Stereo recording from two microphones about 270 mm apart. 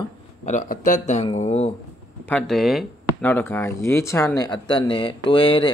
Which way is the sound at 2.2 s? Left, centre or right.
Centre.